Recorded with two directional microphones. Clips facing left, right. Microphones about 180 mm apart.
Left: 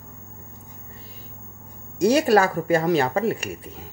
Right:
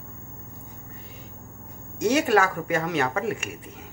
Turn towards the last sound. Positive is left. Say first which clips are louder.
# left 4 dB
turn(degrees=30)  # may be behind; listen again after turning